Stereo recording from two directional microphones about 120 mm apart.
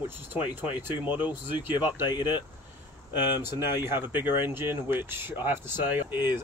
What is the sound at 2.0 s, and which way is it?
Speech, 40° left (ahead or behind).